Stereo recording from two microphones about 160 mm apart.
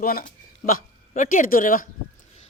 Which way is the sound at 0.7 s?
55° left (ahead or behind).